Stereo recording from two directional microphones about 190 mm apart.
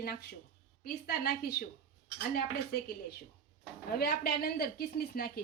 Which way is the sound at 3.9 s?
55° left (ahead or behind).